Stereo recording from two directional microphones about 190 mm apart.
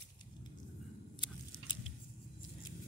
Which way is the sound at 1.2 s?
25° left (ahead or behind).